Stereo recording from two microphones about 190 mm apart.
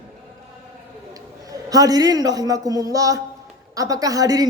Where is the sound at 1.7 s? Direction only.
20° right (ahead or behind).